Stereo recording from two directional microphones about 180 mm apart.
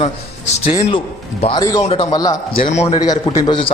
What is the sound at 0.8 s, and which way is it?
A man's voice, 25° left (ahead or behind).